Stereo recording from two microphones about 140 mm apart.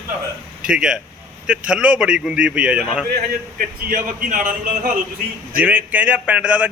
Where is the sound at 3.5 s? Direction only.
75° right (ahead or behind).